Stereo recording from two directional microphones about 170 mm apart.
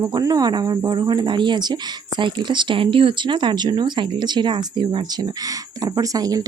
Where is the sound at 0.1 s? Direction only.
20° right (ahead or behind).